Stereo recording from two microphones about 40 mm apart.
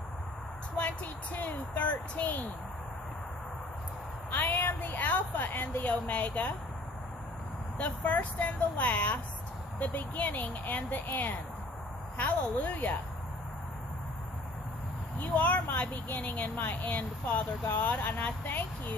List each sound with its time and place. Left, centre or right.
1.3 s speech: left
4.3 s a sound: left
5.9 s speech: left
7.7 s speech: left
12.2 s speech: left
15.1 s speech: left